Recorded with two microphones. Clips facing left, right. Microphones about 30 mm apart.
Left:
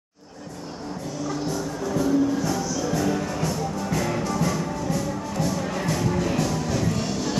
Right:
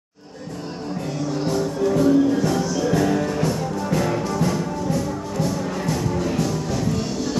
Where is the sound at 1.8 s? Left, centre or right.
Right.